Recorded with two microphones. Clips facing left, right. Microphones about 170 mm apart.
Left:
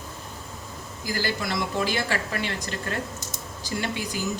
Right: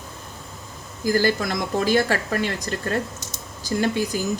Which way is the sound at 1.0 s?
50° right (ahead or behind).